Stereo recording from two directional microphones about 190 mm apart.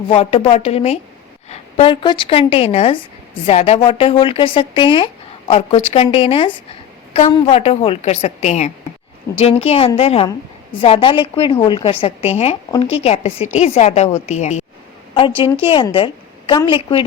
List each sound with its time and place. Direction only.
0.1 s a woman's voice: 30° left (ahead or behind)